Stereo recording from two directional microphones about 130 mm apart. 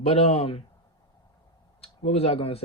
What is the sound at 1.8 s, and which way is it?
Speech, 50° left (ahead or behind).